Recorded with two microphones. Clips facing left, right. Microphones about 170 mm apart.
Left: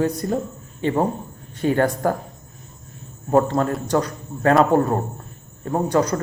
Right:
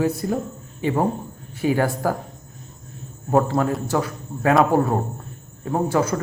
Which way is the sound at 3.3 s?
10° right (ahead or behind).